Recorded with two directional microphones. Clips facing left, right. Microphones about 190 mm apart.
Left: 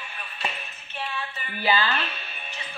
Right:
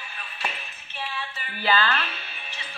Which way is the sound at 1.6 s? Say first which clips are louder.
Even; 15° left (ahead or behind).